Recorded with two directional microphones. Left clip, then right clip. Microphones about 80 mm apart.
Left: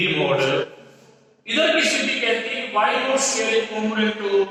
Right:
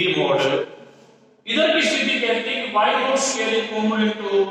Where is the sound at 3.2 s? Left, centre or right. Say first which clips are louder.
Left 1 dB; right.